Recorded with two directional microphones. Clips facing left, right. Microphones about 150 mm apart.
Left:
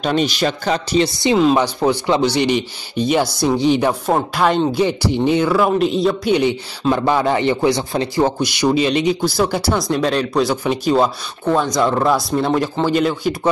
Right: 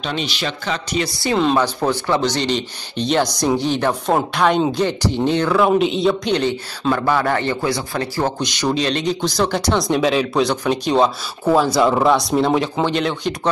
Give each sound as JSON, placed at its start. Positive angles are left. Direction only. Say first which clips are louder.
{"t": 0.0, "sound": "a man's voice", "louder": "left 7 dB", "side_deg": 45}
{"t": 1.3, "sound": "speech", "louder": "left 2 dB", "side_deg": 5}
{"t": 4.1, "sound": "speech", "louder": "right 1 dB", "side_deg": 0}
{"t": 8.4, "sound": "speech", "louder": "left 4 dB", "side_deg": 10}